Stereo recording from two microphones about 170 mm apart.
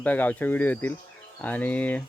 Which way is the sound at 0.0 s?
10° left (ahead or behind).